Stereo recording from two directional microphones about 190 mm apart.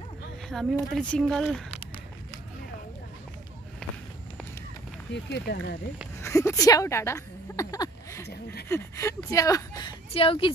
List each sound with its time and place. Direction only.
0.5 s speech: centre (ahead or behind)
5.1 s speech: 65° left (ahead or behind)
6.2 s a woman's voice: 15° left (ahead or behind)
10.1 s speech: 30° left (ahead or behind)